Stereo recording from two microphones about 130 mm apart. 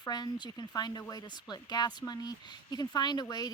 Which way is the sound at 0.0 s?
30° left (ahead or behind).